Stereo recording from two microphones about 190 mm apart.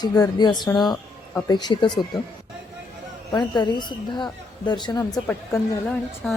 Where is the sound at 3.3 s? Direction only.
25° left (ahead or behind).